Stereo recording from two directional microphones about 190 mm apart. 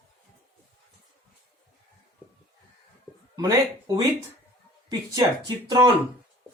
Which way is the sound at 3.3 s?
20° right (ahead or behind).